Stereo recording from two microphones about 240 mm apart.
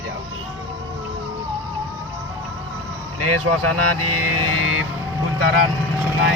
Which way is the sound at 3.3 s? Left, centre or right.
Right.